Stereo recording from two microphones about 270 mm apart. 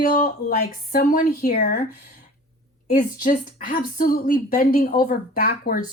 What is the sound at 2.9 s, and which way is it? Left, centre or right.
Speech, left.